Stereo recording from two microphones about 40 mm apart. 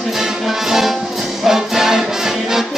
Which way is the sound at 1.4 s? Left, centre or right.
Centre.